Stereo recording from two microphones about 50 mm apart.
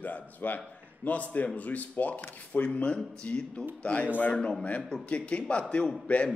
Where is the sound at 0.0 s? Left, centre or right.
Left.